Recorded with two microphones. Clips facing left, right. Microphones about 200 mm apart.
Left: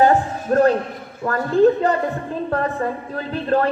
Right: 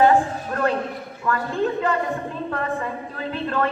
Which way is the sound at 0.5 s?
40° left (ahead or behind).